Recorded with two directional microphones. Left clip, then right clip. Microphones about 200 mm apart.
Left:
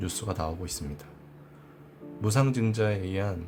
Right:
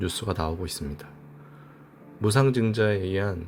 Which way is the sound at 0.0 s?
15° right (ahead or behind).